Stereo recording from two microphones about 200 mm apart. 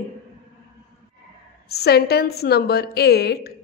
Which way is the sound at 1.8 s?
55° left (ahead or behind).